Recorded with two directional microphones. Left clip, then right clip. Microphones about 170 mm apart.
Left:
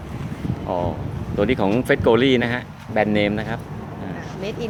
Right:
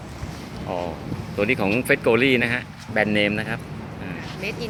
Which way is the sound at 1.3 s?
15° left (ahead or behind).